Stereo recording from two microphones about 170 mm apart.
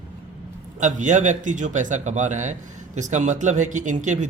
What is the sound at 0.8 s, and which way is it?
Speech, 45° right (ahead or behind).